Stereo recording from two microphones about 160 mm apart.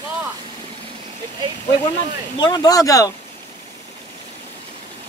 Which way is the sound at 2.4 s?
25° left (ahead or behind).